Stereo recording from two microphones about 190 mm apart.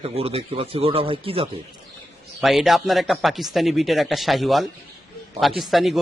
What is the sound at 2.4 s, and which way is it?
A man's voice, centre (ahead or behind).